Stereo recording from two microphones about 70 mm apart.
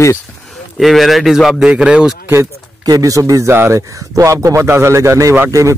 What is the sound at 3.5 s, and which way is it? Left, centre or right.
Speech, right.